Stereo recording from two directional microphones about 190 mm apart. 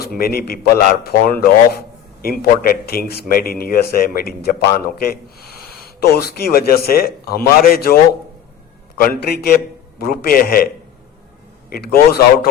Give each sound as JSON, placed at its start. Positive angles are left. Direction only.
{"t": 0.0, "sound": "speech", "side_deg": 50}
{"t": 9.0, "sound": "speech", "side_deg": 55}
{"t": 11.7, "sound": "speech", "side_deg": 55}